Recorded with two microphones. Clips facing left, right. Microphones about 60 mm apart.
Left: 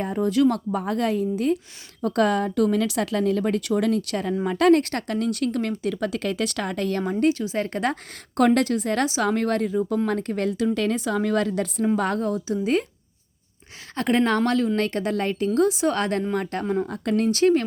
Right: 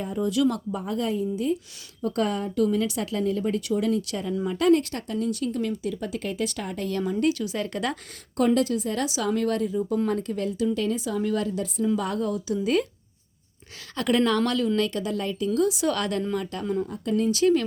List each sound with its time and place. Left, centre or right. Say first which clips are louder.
0.2 s a woman's voice: left 3 dB; left
2.0 s speech: left 5 dB; left
6.9 s speech: left 1 dB; left
8.4 s a woman's voice: left 3 dB; left
9.0 s a woman's voice: left 2 dB; left
11.9 s speech: left 3 dB; left
13.9 s a woman's voice: left 1 dB; left
16.9 s a woman's voice: left 2 dB; left